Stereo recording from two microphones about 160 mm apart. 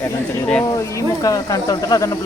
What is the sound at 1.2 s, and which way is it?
Speech, 20° left (ahead or behind).